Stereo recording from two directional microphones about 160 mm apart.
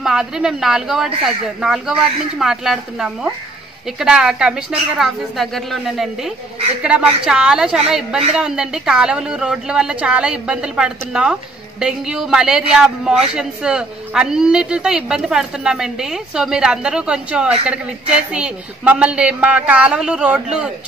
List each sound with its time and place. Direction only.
0.0 s a man's voice: 5° right (ahead or behind)